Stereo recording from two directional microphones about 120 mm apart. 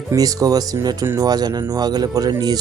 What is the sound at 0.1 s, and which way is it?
Speech, 30° right (ahead or behind).